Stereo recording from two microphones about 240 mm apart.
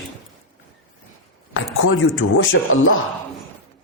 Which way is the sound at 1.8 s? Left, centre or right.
Left.